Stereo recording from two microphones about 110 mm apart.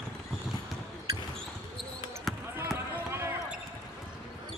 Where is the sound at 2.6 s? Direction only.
20° right (ahead or behind).